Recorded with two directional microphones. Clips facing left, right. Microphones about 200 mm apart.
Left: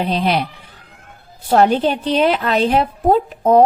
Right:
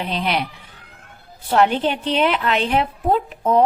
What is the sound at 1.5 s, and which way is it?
A woman's voice, 40° left (ahead or behind).